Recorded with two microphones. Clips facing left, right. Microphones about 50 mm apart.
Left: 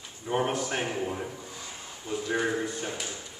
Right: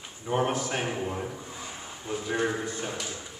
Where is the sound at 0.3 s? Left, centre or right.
Centre.